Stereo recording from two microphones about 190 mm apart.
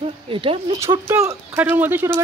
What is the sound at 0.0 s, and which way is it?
Speech, 30° right (ahead or behind).